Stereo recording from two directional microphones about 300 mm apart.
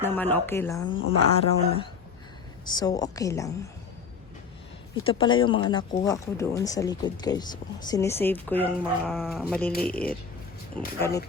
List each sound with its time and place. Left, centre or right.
0.0 s speech: centre
5.0 s speech: centre